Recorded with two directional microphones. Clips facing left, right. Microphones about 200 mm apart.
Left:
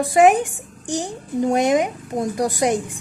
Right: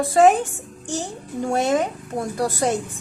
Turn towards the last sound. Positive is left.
turn(degrees=15)  # may be behind; listen again after turning